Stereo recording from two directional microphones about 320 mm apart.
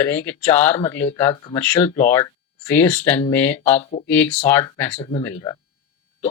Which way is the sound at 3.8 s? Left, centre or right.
Left.